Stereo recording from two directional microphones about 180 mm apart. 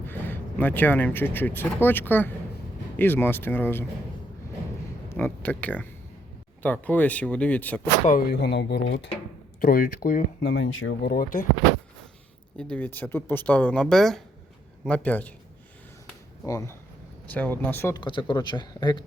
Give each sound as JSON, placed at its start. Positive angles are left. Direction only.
{"t": 0.0, "sound": "speech", "side_deg": 10}
{"t": 5.0, "sound": "speech", "side_deg": 10}
{"t": 8.0, "sound": "speech", "side_deg": 50}
{"t": 8.4, "sound": "speech", "side_deg": 65}
{"t": 10.5, "sound": "speech", "side_deg": 85}
{"t": 12.5, "sound": "speech", "side_deg": 5}
{"t": 16.5, "sound": "speech", "side_deg": 15}
{"t": 18.0, "sound": "speech", "side_deg": 25}